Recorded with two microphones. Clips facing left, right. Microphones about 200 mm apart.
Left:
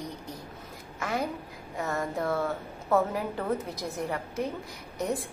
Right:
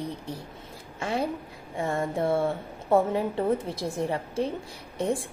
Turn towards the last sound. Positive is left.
turn(degrees=-30)  # may be behind; listen again after turning